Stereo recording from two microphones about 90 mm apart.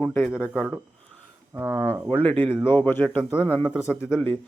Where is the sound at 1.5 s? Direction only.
30° right (ahead or behind).